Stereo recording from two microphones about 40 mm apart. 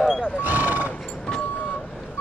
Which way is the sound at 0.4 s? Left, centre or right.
Right.